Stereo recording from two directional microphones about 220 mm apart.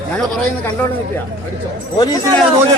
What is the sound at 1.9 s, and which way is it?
Speech, 15° left (ahead or behind).